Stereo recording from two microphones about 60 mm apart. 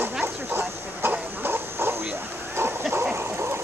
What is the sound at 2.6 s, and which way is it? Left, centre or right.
Dog, right.